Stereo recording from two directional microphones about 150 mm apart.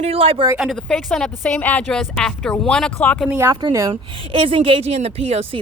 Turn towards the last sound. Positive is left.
turn(degrees=-40)  # may be behind; listen again after turning